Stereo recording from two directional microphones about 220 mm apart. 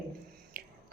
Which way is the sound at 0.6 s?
45° right (ahead or behind).